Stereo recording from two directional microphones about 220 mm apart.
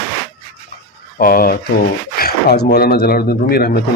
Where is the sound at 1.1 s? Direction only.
40° left (ahead or behind).